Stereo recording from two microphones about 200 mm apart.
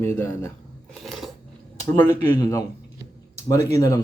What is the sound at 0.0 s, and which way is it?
Speech, 10° left (ahead or behind).